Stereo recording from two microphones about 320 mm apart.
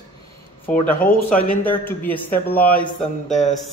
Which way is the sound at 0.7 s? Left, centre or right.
Centre.